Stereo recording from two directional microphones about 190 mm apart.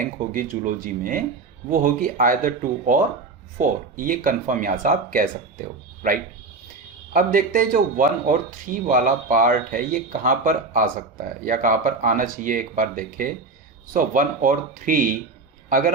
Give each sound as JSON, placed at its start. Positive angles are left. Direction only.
{"t": 0.0, "sound": "speech", "side_deg": -45}